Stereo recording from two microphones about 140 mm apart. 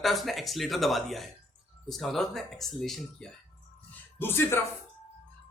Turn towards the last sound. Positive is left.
turn(degrees=15)  # may be behind; listen again after turning